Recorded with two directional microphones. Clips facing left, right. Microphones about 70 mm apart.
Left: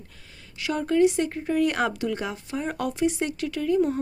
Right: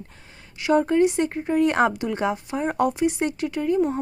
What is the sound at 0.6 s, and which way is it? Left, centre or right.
Speech, right.